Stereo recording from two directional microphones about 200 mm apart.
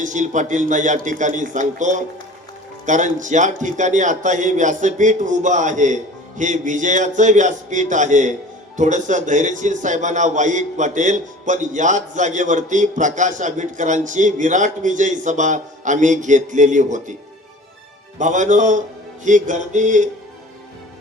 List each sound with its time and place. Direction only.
0.0 s a man's voice: 40° right (ahead or behind)
18.2 s a man's voice: 40° right (ahead or behind)